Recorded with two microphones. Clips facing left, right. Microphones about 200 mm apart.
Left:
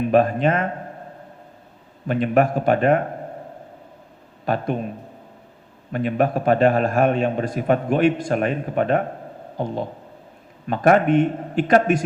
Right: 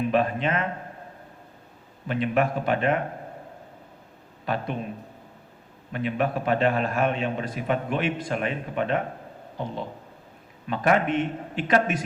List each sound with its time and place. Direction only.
0.1 s a man's voice: 45° left (ahead or behind)
2.0 s a man's voice: 45° left (ahead or behind)
4.4 s a man's voice: 45° left (ahead or behind)
5.9 s a man's voice: 45° left (ahead or behind)
10.7 s a man's voice: 45° left (ahead or behind)